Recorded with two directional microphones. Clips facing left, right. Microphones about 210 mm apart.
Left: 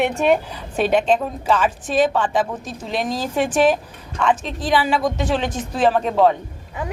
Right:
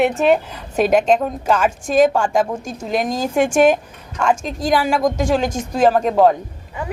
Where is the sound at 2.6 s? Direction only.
45° right (ahead or behind).